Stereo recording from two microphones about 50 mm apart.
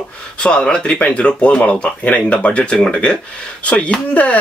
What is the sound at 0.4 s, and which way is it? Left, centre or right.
Speech, centre.